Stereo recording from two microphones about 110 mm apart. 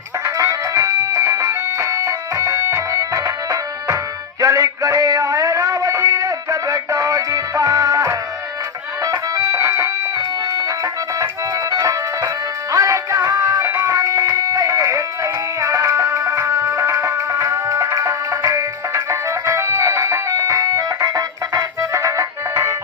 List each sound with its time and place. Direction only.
0.3 s music: 30° right (ahead or behind)
11.7 s music: 35° right (ahead or behind)